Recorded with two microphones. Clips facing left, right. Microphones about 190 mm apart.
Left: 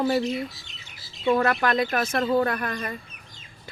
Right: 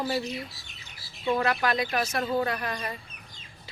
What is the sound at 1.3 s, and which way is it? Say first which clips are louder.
Speech: left 4 dB; 50° left (ahead or behind).